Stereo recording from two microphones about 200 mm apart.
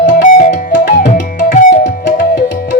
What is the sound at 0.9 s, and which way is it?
Tabla, 40° left (ahead or behind).